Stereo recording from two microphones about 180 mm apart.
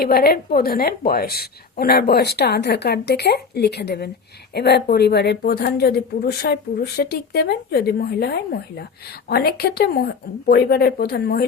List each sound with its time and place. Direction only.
0.0 s speech: 60° left (ahead or behind)